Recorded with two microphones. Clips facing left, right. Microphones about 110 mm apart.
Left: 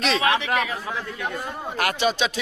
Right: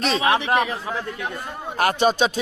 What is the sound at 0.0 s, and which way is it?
Speech, 40° right (ahead or behind).